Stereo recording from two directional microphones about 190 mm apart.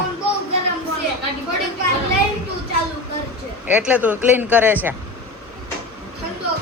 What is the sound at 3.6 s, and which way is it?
A man's voice, 10° right (ahead or behind).